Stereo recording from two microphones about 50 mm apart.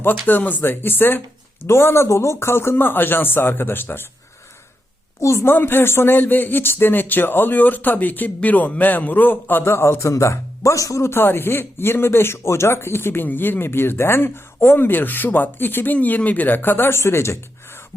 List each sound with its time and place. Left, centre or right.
0.0 s a man's voice: left
1.6 s speech: left
5.2 s a woman's voice: left
5.5 s a man's voice: left
9.6 s a man's voice: left
11.1 s speech: left
13.2 s speech: left